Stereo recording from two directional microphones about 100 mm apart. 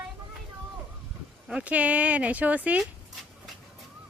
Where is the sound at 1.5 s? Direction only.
10° right (ahead or behind).